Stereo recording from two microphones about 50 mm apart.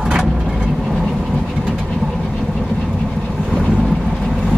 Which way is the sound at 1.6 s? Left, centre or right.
Centre.